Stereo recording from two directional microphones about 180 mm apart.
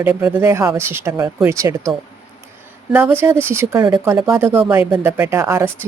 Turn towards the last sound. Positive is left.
turn(degrees=-15)  # may be behind; listen again after turning